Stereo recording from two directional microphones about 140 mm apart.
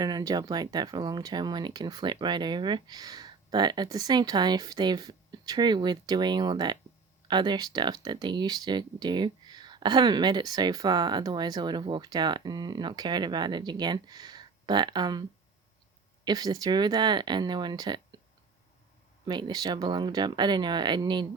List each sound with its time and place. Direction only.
0.0 s speech: 25° right (ahead or behind)
16.2 s speech: 30° right (ahead or behind)
19.2 s speech: 30° right (ahead or behind)